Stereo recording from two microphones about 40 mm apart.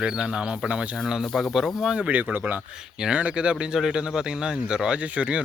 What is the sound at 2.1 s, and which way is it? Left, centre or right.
Speech, right.